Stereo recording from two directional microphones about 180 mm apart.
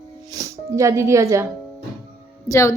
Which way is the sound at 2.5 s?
15° left (ahead or behind).